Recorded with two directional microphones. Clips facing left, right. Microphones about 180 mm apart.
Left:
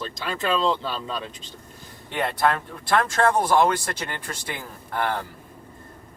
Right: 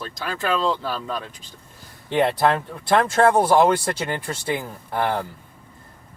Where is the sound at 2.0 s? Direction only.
25° right (ahead or behind).